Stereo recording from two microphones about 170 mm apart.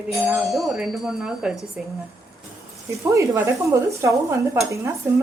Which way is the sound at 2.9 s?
20° right (ahead or behind).